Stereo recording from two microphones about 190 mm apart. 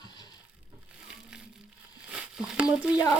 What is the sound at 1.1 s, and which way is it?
Crushing, 5° right (ahead or behind).